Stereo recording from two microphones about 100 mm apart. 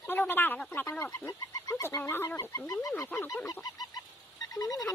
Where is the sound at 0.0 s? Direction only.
20° left (ahead or behind).